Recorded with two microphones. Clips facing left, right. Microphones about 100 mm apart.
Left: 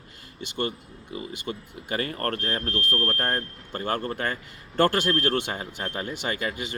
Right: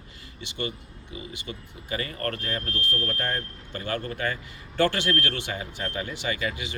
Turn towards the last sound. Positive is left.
turn(degrees=45)  # may be behind; listen again after turning